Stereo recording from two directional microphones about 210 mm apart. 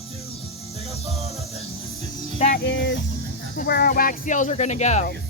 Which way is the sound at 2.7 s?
60° left (ahead or behind).